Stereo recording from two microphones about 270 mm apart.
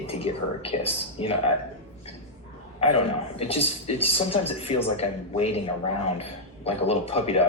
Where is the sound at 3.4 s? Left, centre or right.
Left.